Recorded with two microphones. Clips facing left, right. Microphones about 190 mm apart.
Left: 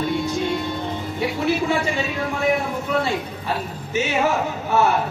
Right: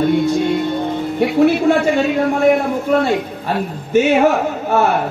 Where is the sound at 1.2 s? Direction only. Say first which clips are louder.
Right 9 dB; 60° right (ahead or behind).